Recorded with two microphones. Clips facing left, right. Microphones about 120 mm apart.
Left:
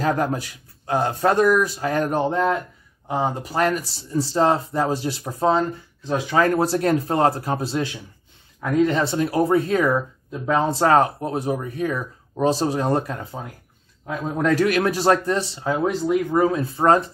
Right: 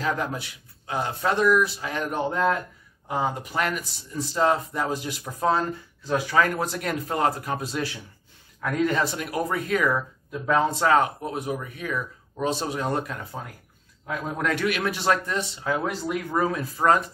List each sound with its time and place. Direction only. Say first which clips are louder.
0.0 s speech: left 6 dB; 45° left (ahead or behind)
3.1 s speech: left 3 dB; 30° left (ahead or behind)
10.8 s speech: left 4 dB; 40° left (ahead or behind)